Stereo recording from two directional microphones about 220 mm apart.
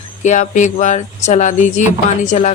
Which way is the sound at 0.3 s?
35° left (ahead or behind).